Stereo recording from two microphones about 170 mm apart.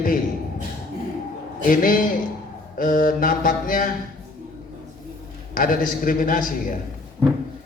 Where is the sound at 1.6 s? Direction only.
55° left (ahead or behind).